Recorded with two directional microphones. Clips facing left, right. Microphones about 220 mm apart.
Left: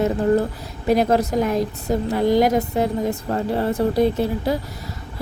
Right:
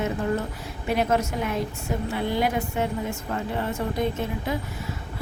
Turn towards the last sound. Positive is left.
turn(degrees=35)  # may be behind; listen again after turning